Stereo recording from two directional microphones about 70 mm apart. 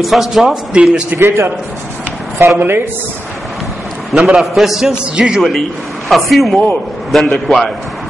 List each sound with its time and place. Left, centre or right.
0.0 s a man's voice: centre
1.1 s a man's voice: right
4.1 s a man's voice: centre
6.0 s a man's voice: centre